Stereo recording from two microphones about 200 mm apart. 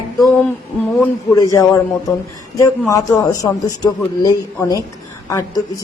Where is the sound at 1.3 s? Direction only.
15° left (ahead or behind).